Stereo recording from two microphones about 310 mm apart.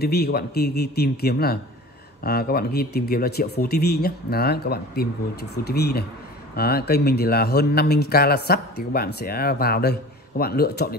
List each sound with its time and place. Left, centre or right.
0.0 s speech: left